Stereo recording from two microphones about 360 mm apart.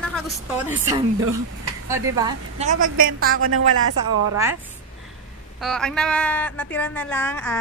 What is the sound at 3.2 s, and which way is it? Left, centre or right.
Speech, right.